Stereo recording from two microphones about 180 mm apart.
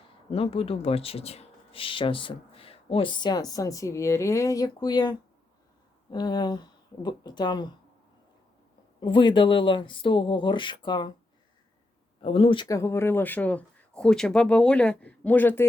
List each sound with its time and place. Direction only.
0.1 s speech: 30° left (ahead or behind)
9.0 s speech: 25° left (ahead or behind)
12.2 s speech: 30° left (ahead or behind)
12.6 s speech: 15° left (ahead or behind)